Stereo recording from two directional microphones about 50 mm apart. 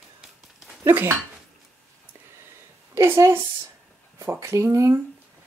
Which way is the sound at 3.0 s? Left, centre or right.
Right.